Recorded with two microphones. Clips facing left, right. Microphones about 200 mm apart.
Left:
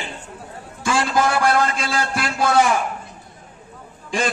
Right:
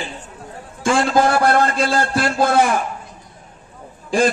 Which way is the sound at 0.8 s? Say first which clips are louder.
Right 4 dB; 25° right (ahead or behind).